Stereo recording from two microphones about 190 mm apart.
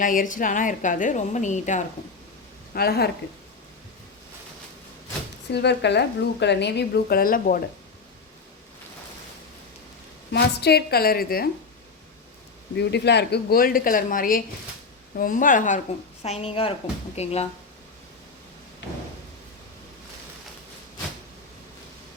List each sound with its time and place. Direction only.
0.0 s a woman's voice: 45° left (ahead or behind)
2.7 s a woman's voice: 55° left (ahead or behind)
5.5 s a woman's voice: 65° left (ahead or behind); by 7.6 s 45° left (ahead or behind)
10.3 s a woman's voice: 60° left (ahead or behind)
12.7 s a woman's voice: 60° left (ahead or behind); by 15.8 s 45° left (ahead or behind)
16.2 s speech: 35° left (ahead or behind)